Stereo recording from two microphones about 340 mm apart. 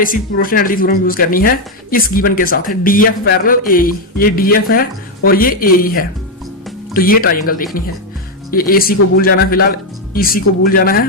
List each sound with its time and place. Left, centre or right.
0.0 s speech: left